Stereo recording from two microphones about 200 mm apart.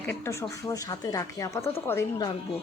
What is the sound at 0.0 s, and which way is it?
Speech, 10° left (ahead or behind).